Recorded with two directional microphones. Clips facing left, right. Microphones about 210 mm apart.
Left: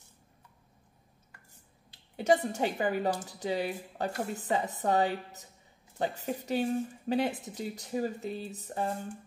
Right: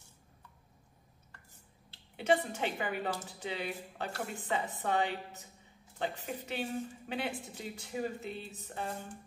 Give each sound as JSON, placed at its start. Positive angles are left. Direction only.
{"t": 2.1, "sound": "speech", "side_deg": 40}